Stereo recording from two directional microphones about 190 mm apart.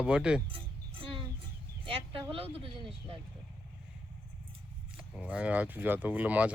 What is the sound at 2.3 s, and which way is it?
Speech, 30° right (ahead or behind).